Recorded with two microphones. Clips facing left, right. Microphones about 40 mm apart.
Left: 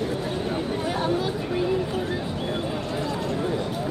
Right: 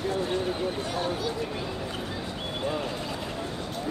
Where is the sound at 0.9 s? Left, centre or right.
Centre.